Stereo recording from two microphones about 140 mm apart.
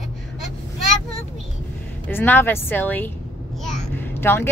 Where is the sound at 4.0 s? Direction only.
15° left (ahead or behind).